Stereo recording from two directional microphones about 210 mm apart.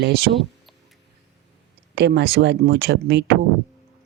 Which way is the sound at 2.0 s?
55° right (ahead or behind).